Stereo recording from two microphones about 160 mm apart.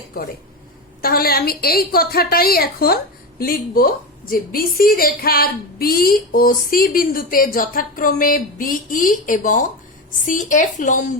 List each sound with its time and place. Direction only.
1.0 s a woman's voice: 70° left (ahead or behind); by 11.0 s 50° left (ahead or behind)